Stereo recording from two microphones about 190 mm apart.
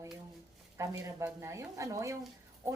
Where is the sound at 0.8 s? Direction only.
15° right (ahead or behind).